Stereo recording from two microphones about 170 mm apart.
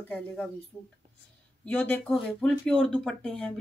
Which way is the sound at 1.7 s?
10° left (ahead or behind).